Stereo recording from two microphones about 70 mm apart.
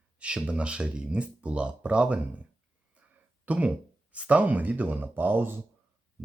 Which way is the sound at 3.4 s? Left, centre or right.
Centre.